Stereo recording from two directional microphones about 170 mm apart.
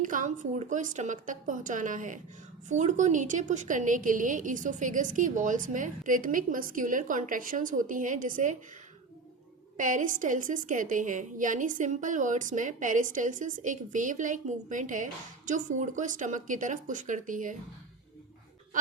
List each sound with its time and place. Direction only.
0.0 s a woman's voice: 50° right (ahead or behind)
9.7 s a woman's voice: 50° right (ahead or behind)